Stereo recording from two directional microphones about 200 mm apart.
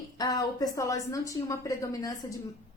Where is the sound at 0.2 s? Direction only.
20° left (ahead or behind).